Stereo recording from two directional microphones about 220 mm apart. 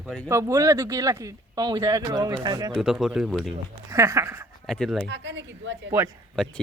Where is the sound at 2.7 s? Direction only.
Centre (ahead or behind).